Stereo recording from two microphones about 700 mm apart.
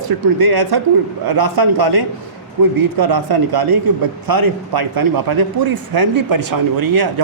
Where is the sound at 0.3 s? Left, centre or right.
Right.